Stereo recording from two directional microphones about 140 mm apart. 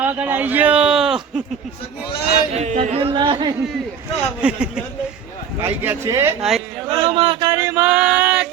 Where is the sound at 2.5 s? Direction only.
50° right (ahead or behind).